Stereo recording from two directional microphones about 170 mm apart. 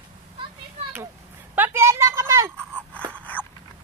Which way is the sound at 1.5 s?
10° right (ahead or behind).